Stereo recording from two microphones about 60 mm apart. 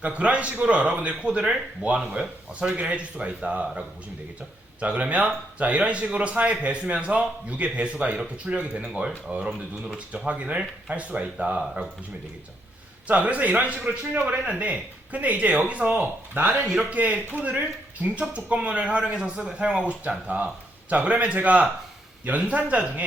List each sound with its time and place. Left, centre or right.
0.0 s speech: right
13.1 s speech: right